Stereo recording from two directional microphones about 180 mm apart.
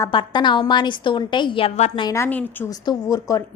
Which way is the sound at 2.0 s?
20° left (ahead or behind).